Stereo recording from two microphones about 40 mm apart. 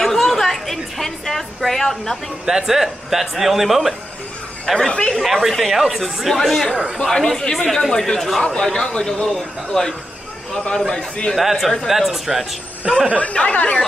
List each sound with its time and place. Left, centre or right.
0.0 s a sound: centre
2.4 s speech: centre
4.9 s speech: left
5.2 s a man's voice: centre
8.0 s a man's voice: centre
11.0 s speech: left
11.3 s speech: centre
13.2 s speech: left